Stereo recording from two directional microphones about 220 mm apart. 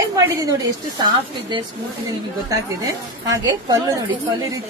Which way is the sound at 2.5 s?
15° right (ahead or behind).